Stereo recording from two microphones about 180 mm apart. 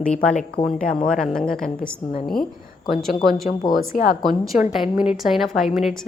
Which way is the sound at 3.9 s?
45° left (ahead or behind).